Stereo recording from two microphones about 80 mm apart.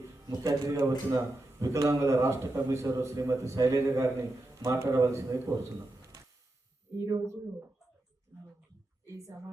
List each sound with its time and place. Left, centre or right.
0.0 s speech: right